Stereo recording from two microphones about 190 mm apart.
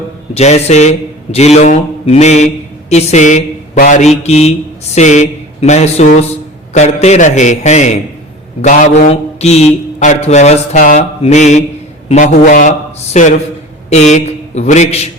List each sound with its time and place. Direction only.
0.3 s a man's voice: 35° left (ahead or behind)